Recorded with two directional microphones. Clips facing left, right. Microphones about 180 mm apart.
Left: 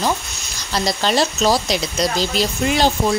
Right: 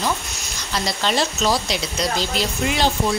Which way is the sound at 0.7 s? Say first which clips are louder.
Left 3 dB; 40° left (ahead or behind).